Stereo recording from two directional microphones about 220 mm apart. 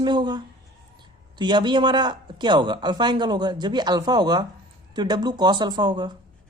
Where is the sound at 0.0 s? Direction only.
20° right (ahead or behind).